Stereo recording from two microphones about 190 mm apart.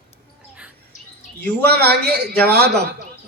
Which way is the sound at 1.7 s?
55° right (ahead or behind).